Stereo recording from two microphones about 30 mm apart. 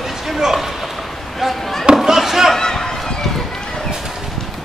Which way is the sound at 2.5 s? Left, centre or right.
Centre.